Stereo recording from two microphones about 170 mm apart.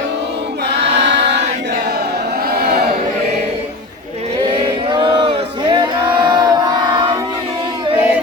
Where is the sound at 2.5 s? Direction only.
65° right (ahead or behind).